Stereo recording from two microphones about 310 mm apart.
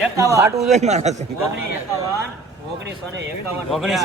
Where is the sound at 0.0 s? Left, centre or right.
Centre.